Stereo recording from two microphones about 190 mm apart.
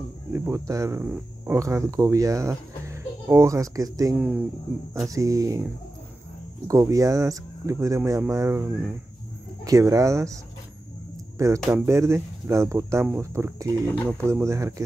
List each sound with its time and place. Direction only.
0.3 s speech: 15° right (ahead or behind)
6.7 s speech: 15° right (ahead or behind)